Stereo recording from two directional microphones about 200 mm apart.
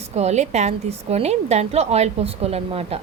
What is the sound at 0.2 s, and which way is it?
A woman's voice, 35° right (ahead or behind).